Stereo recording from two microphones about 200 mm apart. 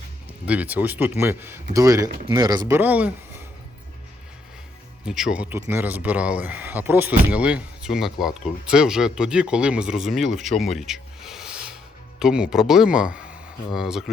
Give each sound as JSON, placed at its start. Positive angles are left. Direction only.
{"t": 0.4, "sound": "speech", "side_deg": -5}
{"t": 5.0, "sound": "speech", "side_deg": -5}